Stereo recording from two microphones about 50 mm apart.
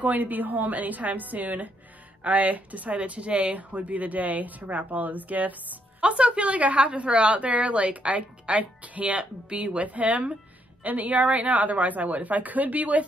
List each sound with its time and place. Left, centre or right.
0.0 s speech: right
5.9 s a woman's voice: right